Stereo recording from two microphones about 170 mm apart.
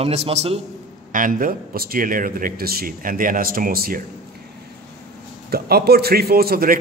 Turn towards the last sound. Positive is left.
turn(degrees=-60)  # may be behind; listen again after turning